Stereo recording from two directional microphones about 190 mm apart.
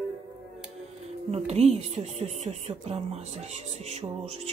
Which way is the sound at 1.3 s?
35° right (ahead or behind).